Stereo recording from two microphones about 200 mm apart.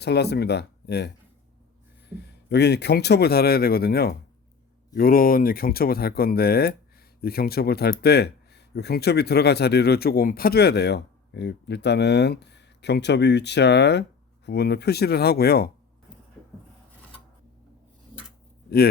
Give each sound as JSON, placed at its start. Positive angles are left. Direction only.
{"t": 0.0, "sound": "speech", "side_deg": 55}
{"t": 2.1, "sound": "speech", "side_deg": 55}